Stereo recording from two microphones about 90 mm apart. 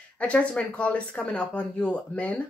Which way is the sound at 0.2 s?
15° left (ahead or behind).